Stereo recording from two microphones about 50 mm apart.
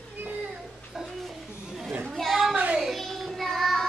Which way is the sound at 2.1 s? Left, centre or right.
Centre.